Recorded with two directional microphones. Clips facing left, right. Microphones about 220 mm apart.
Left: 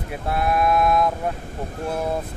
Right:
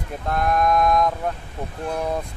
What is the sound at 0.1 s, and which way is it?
Speech, 5° left (ahead or behind).